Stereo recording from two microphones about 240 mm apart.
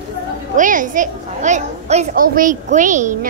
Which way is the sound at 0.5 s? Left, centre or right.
Right.